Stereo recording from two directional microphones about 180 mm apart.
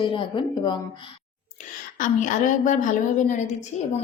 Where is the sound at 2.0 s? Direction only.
45° left (ahead or behind).